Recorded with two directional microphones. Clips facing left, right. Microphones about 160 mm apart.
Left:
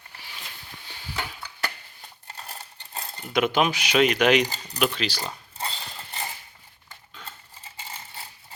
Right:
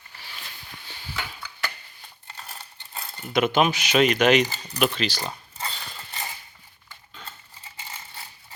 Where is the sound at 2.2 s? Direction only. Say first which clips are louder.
Left 1 dB; 40° left (ahead or behind).